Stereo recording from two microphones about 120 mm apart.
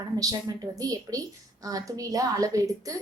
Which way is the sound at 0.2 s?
30° right (ahead or behind).